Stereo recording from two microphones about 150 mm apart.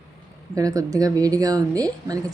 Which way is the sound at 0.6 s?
25° right (ahead or behind).